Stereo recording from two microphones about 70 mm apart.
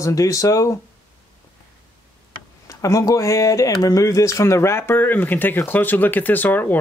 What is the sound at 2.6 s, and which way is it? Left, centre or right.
Speech, left.